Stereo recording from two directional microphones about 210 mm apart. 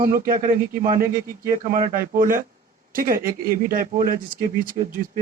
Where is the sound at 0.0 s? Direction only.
40° right (ahead or behind).